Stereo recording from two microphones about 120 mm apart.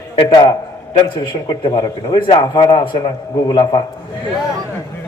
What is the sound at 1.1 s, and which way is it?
A man's voice, 45° left (ahead or behind).